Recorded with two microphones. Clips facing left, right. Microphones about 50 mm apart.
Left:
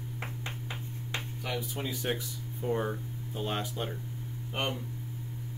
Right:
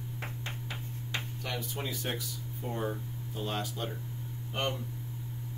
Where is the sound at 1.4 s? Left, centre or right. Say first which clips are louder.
Left 4 dB; centre.